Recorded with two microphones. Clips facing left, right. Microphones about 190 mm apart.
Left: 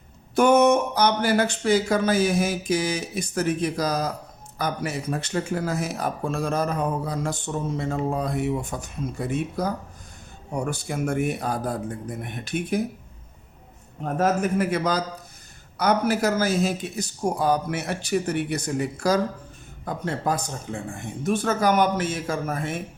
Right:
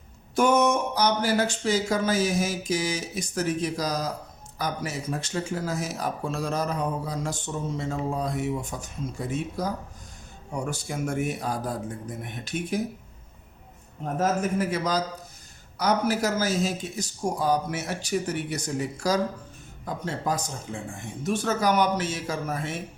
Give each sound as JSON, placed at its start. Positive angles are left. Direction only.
{"t": 0.3, "sound": "speech", "side_deg": 60}
{"t": 14.0, "sound": "speech", "side_deg": 60}